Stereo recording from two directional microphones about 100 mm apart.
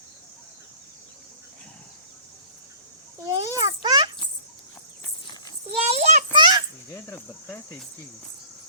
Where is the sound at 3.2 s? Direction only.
40° right (ahead or behind).